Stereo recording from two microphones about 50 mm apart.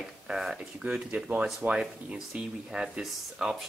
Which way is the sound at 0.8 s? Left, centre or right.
Right.